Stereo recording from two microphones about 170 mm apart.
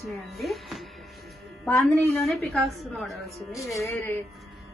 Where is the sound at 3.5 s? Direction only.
20° left (ahead or behind).